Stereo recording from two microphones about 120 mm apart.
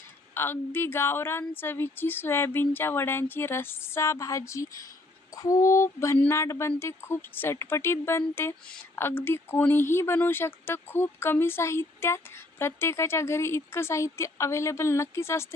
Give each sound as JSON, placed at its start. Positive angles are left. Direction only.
{"t": 0.3, "sound": "speech", "side_deg": 20}